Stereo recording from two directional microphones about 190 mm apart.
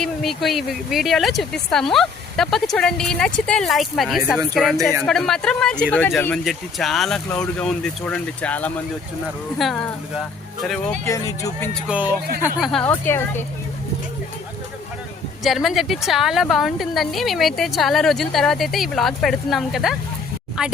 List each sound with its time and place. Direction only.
0.0 s a woman's voice: centre (ahead or behind)
11.0 s a woman's voice: 15° left (ahead or behind)
11.7 s a woman's voice: 5° right (ahead or behind); by 13.4 s 10° left (ahead or behind)
15.4 s a woman's voice: centre (ahead or behind)